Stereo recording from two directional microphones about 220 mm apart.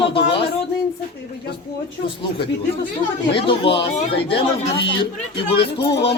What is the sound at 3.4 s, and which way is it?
A man's voice, 25° left (ahead or behind).